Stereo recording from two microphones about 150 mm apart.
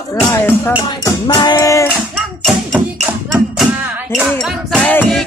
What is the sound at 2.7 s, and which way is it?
Music, 10° right (ahead or behind).